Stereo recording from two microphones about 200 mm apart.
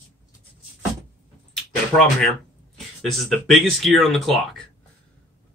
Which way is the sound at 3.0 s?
Centre (ahead or behind).